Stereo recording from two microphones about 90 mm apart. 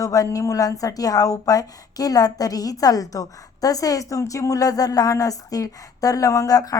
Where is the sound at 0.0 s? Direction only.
40° left (ahead or behind).